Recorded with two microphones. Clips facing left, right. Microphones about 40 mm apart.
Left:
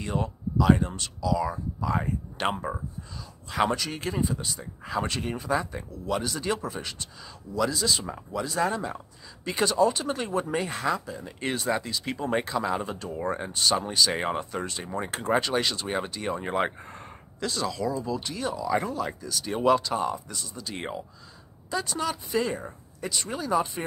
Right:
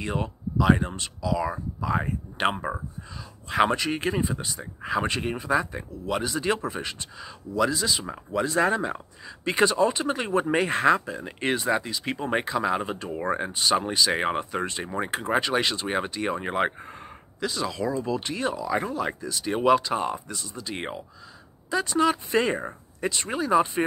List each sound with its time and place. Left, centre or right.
0.0 s speech: right
8.3 s speech: right
10.5 s speech: right
11.5 s speech: right
12.4 s speech: centre
12.7 s speech: right
13.5 s speech: centre
15.0 s speech: centre
17.6 s speech: right
18.6 s speech: centre
19.4 s speech: centre